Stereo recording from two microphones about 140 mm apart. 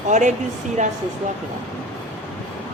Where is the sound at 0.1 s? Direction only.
60° right (ahead or behind).